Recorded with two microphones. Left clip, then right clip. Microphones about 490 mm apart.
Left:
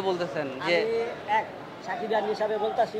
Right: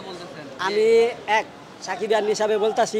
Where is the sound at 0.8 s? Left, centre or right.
Right.